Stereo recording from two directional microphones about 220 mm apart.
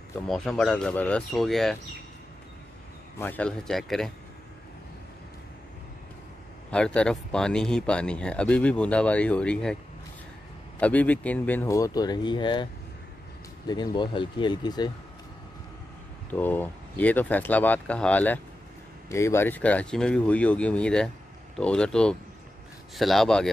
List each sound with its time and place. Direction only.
0.3 s speech: 5° left (ahead or behind)
3.2 s speech: 10° left (ahead or behind)
6.7 s speech: 5° left (ahead or behind)
10.8 s speech: 5° left (ahead or behind)
13.9 s speech: 20° left (ahead or behind)
16.3 s speech: 10° left (ahead or behind)